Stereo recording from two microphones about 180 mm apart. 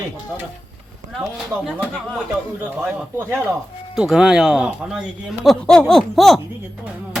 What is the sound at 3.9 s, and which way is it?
Speech, 5° right (ahead or behind).